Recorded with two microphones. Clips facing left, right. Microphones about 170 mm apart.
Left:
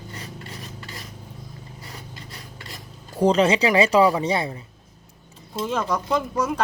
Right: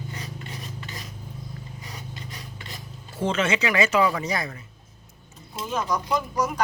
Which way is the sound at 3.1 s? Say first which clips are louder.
Left 7 dB; 35° left (ahead or behind).